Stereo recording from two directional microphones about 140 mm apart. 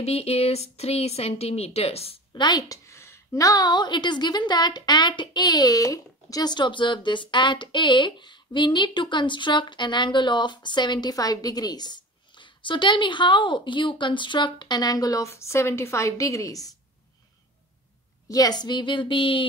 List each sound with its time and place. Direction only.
0.0 s speech: 45° left (ahead or behind)
2.3 s a woman's voice: 30° left (ahead or behind)
18.3 s a woman's voice: 30° left (ahead or behind)